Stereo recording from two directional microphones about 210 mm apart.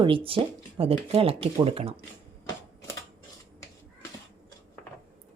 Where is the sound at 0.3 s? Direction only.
25° right (ahead or behind).